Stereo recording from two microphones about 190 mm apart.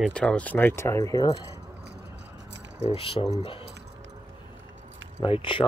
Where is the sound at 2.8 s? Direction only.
30° left (ahead or behind).